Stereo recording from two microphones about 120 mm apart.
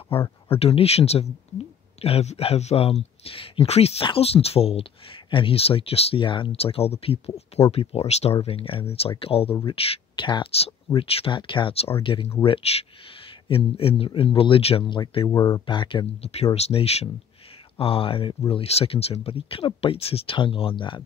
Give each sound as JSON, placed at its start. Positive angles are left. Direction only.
{"t": 0.1, "sound": "speech", "side_deg": 55}
{"t": 15.3, "sound": "speech", "side_deg": 25}
{"t": 15.6, "sound": "speech", "side_deg": 45}